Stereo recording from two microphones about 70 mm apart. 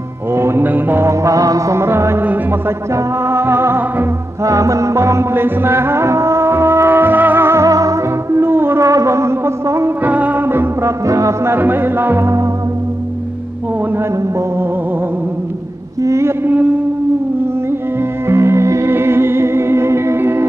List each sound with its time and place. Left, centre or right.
0.3 s mantra: right
1.0 s mantra: right
1.8 s music: right
4.4 s music: right
7.6 s music: right
8.8 s music: right
10.0 s music: right
10.9 s music: right
11.5 s music: right
16.0 s mantra: right
16.4 s a man's voice: right
18.2 s music: right